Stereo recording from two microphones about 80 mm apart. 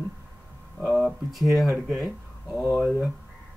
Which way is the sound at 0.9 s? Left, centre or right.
Centre.